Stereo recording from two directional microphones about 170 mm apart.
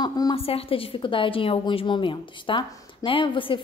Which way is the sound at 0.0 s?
25° left (ahead or behind).